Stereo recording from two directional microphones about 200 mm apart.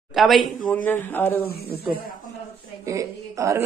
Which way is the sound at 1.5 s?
50° left (ahead or behind).